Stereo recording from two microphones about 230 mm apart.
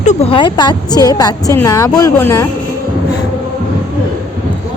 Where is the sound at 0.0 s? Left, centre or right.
Left; by 2.5 s centre.